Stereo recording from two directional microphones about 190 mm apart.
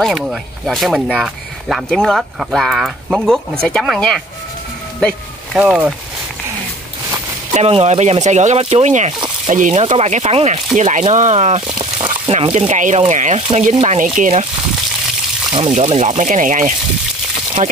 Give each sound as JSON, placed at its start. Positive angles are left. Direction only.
{"t": 0.0, "sound": "speech", "side_deg": 0}
{"t": 5.6, "sound": "speech", "side_deg": -5}
{"t": 7.5, "sound": "speech", "side_deg": -35}
{"t": 15.5, "sound": "speech", "side_deg": -35}